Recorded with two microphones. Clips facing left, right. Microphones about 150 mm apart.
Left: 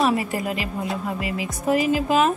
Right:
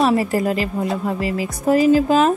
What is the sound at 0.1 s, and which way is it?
Speech, 35° right (ahead or behind).